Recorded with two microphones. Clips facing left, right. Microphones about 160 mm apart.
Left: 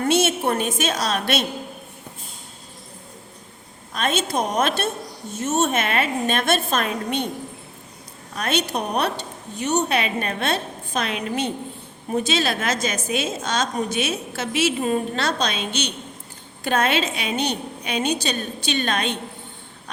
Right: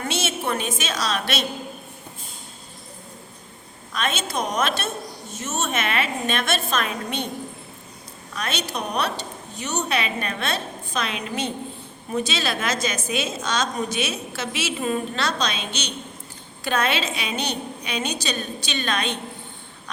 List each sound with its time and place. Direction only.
0.0 s a woman's voice: 55° left (ahead or behind)
3.9 s a woman's voice: 50° left (ahead or behind)
8.4 s a woman's voice: 50° left (ahead or behind)